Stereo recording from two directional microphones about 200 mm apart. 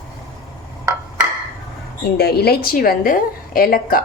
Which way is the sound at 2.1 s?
50° left (ahead or behind).